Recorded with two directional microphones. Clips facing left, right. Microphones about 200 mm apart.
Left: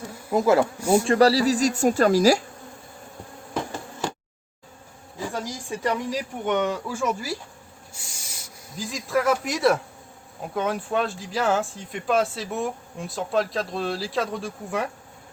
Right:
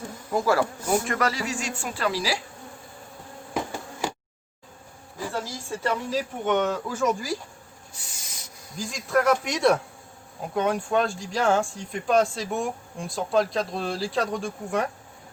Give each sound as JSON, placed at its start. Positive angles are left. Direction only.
{"t": 0.3, "sound": "speech", "side_deg": 20}
{"t": 1.0, "sound": "speech", "side_deg": 30}
{"t": 3.5, "sound": "insect", "side_deg": -10}
{"t": 5.3, "sound": "speech", "side_deg": 15}
{"t": 8.8, "sound": "speech", "side_deg": 0}